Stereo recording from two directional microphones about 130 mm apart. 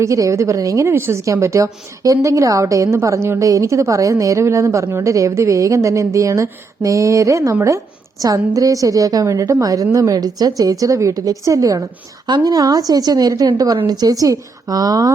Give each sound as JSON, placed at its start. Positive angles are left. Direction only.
{"t": 0.0, "sound": "a woman's voice", "side_deg": -25}